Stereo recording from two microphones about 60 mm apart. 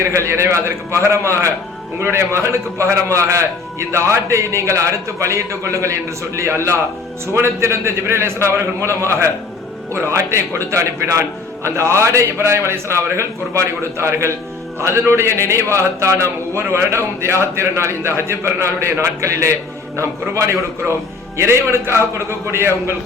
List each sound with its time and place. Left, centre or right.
0.0 s a man's voice: right
2.0 s a man's voice: right